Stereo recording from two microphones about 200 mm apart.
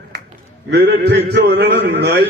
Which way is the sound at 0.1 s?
55° right (ahead or behind).